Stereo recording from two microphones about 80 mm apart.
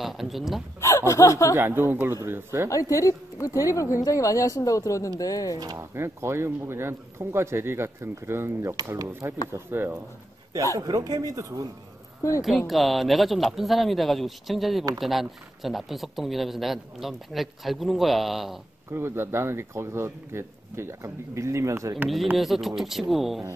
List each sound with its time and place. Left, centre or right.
0.0 s speech: centre
0.7 s speech: left
1.5 s speech: right
2.7 s a woman's voice: left
5.9 s speech: right
8.9 s speech: right
9.5 s speech: right
10.8 s speech: right
12.2 s speech: left
12.4 s speech: centre
18.9 s speech: right
22.4 s speech: centre